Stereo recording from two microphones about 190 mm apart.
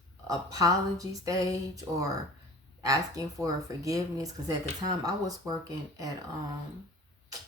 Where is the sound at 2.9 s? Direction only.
20° right (ahead or behind).